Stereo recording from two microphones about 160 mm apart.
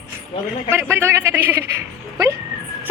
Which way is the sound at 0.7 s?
15° right (ahead or behind).